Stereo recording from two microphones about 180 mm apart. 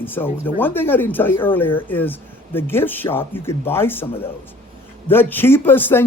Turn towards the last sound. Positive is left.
turn(degrees=10)  # may be behind; listen again after turning